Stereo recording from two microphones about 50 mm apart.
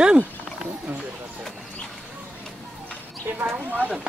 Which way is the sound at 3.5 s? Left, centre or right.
Right.